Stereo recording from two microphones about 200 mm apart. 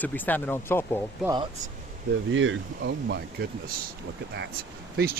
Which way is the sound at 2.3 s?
70° right (ahead or behind).